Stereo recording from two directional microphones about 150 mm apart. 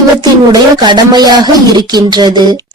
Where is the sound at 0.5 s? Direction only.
25° right (ahead or behind).